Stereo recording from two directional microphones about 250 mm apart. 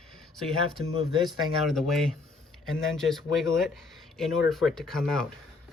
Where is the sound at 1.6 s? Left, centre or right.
Centre.